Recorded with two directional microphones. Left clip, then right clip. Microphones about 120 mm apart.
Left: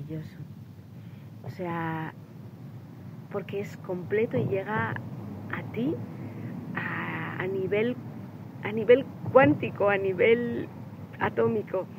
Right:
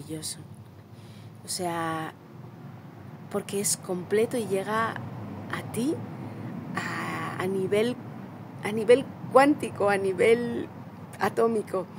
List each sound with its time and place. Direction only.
0.1 s speech: 35° right (ahead or behind)
1.6 s speech: 40° right (ahead or behind)
3.3 s a woman's voice: 35° right (ahead or behind)
6.7 s vehicle: 35° right (ahead or behind)
8.6 s speech: 35° right (ahead or behind)